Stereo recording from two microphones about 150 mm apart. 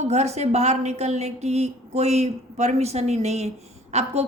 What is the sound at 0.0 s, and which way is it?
Speech, 45° right (ahead or behind).